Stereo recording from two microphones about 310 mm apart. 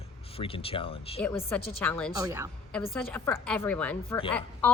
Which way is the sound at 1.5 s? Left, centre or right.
Centre.